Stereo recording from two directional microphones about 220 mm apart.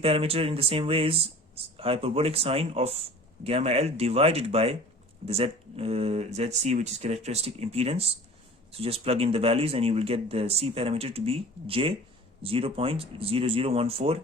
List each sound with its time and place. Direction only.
0.0 s speech: 25° right (ahead or behind)